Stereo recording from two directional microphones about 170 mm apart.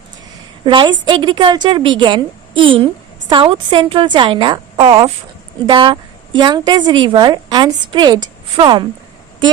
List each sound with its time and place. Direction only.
0.6 s a woman's voice: 30° right (ahead or behind)